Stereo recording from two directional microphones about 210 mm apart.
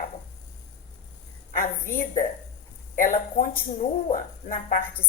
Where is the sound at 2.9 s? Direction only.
40° left (ahead or behind).